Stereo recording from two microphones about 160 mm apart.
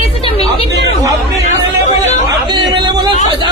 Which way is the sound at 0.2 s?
35° left (ahead or behind).